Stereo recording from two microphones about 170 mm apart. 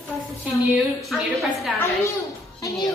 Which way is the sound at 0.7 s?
Centre (ahead or behind).